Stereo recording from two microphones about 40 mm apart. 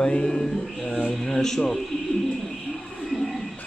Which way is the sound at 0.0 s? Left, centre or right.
Centre.